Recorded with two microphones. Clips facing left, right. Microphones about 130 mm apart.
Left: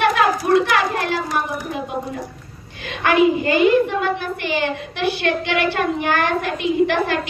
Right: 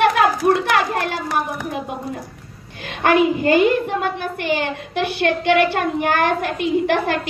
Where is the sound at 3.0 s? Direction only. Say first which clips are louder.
Even; 45° right (ahead or behind).